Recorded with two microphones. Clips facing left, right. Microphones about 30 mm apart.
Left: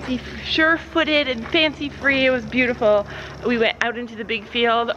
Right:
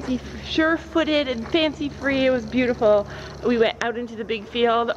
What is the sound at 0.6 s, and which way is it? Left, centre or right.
Speech, left.